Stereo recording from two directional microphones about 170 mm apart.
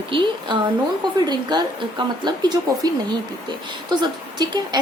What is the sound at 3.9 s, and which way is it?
Speech, 25° right (ahead or behind).